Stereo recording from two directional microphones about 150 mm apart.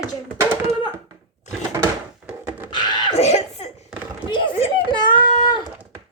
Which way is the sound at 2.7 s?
30° left (ahead or behind).